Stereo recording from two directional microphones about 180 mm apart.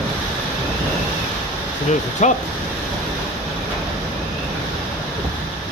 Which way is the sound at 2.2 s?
40° left (ahead or behind).